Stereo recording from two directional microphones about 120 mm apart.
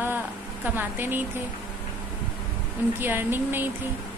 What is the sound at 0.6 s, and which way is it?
Speech, 15° right (ahead or behind).